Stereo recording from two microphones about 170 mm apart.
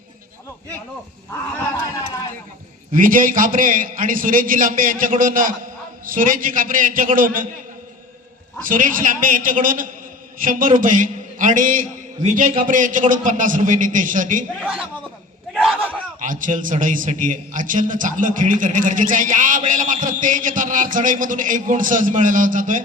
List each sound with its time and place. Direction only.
2.9 s a man's voice: 55° right (ahead or behind)
8.6 s a man's voice: 55° right (ahead or behind)
14.6 s a man's voice: 10° right (ahead or behind)
15.5 s a sound: 5° right (ahead or behind)
16.2 s a man's voice: 50° right (ahead or behind)